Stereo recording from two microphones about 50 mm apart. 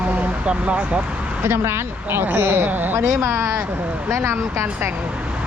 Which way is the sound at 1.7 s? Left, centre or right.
Right.